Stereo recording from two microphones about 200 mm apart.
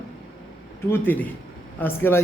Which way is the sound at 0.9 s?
10° left (ahead or behind).